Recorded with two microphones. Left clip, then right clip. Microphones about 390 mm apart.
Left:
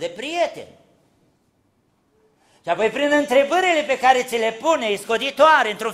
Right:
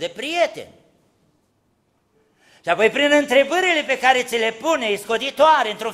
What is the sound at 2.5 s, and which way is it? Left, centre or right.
Speech, right.